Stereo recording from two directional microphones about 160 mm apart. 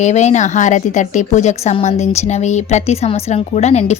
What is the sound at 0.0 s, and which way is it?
Speech, 45° left (ahead or behind).